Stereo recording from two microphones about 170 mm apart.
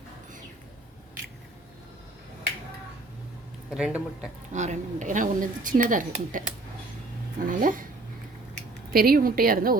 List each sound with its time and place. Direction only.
3.7 s speech: 5° right (ahead or behind)
4.5 s speech: 45° right (ahead or behind)
7.4 s speech: 50° right (ahead or behind)
8.9 s a woman's voice: 60° right (ahead or behind)